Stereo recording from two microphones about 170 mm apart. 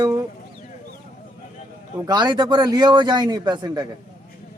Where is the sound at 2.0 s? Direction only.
25° right (ahead or behind).